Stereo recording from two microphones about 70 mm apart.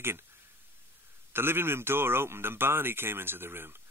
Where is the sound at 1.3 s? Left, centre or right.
Right.